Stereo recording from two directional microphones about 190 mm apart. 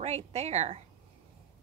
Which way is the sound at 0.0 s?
35° right (ahead or behind).